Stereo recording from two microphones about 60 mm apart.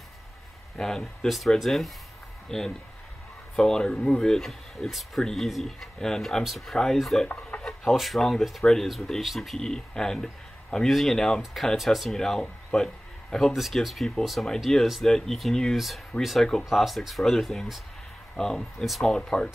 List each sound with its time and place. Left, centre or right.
0.7 s speech: centre
7.5 s a sound: left
7.9 s speech: centre
13.5 s speech: centre
18.3 s speech: centre
19.1 s speech: centre